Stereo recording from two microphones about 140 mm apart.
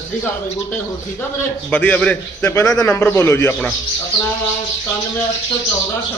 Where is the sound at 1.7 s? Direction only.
10° left (ahead or behind).